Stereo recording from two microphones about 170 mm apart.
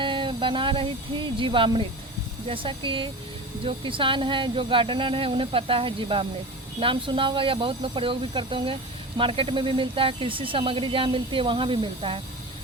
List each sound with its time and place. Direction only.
0.0 s speech: 30° right (ahead or behind)